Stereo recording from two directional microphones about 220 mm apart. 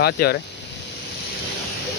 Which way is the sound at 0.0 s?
45° left (ahead or behind).